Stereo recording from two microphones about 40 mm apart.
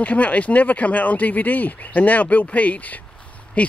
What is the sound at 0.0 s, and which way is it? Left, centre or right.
Speech, left.